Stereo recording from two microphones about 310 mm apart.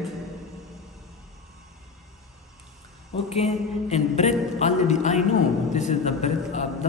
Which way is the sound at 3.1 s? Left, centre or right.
Centre.